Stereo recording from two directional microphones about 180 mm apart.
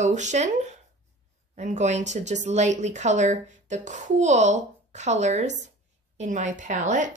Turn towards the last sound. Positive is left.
turn(degrees=-45)  # may be behind; listen again after turning